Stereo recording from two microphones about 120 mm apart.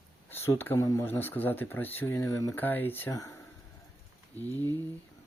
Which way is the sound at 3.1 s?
30° left (ahead or behind).